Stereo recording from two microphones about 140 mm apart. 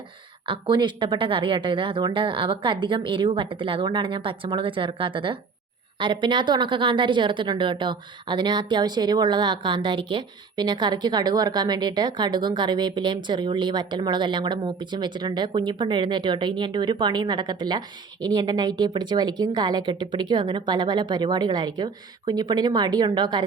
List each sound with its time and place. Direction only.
0.4 s a woman's voice: 35° right (ahead or behind)